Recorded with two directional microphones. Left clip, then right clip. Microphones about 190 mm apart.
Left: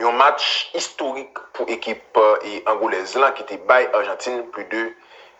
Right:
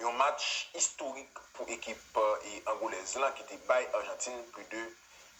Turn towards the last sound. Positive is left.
turn(degrees=35)  # may be behind; listen again after turning